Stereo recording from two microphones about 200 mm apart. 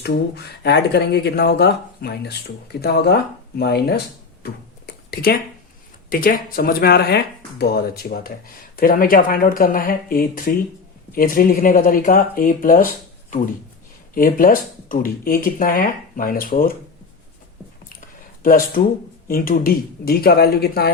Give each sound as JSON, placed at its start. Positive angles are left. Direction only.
{"t": 0.0, "sound": "speech", "side_deg": 55}
{"t": 6.1, "sound": "speech", "side_deg": 45}
{"t": 14.1, "sound": "speech", "side_deg": 45}
{"t": 18.4, "sound": "speech", "side_deg": 45}